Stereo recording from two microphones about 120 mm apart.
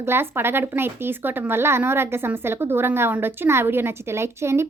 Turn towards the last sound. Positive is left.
turn(degrees=-20)  # may be behind; listen again after turning